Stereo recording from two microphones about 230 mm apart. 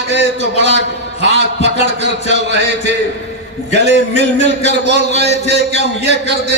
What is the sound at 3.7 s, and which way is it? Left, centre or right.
Speech, left.